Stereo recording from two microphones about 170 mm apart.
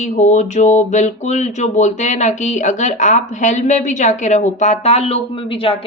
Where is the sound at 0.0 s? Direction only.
45° left (ahead or behind).